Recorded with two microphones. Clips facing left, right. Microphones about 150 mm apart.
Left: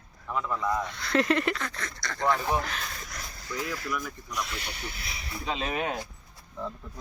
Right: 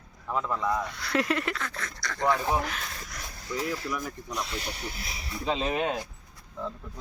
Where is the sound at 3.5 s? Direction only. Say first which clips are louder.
Right 2 dB; 25° right (ahead or behind).